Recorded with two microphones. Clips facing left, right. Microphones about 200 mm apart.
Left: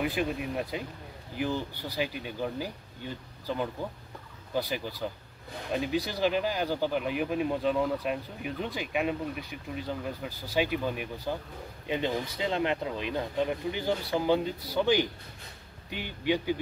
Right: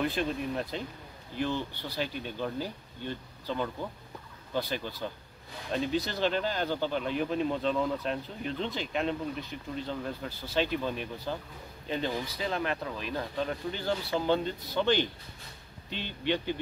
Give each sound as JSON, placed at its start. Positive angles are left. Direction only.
{"t": 0.0, "sound": "speech", "side_deg": 10}